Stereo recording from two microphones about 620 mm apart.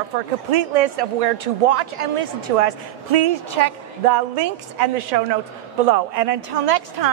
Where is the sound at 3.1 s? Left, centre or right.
Right.